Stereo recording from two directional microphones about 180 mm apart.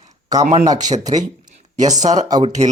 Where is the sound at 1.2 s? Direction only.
45° right (ahead or behind).